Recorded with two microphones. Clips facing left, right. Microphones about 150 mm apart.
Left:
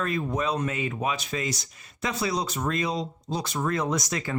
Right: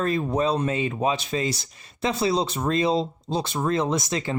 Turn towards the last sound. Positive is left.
turn(degrees=-25)  # may be behind; listen again after turning